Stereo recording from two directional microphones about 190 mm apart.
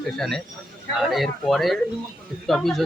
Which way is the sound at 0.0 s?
Centre (ahead or behind).